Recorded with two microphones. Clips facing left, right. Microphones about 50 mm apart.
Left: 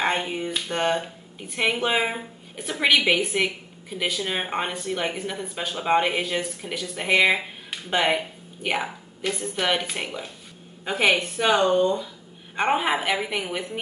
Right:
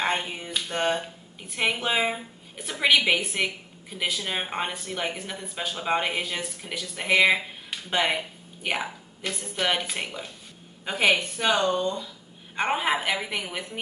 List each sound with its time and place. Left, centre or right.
0.0 s a woman's voice: centre
11.6 s speech: left
12.5 s a woman's voice: centre